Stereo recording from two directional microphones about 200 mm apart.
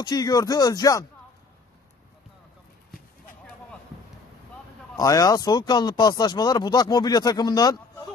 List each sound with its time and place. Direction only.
0.0 s speech: 20° left (ahead or behind)
4.9 s speech: 20° left (ahead or behind)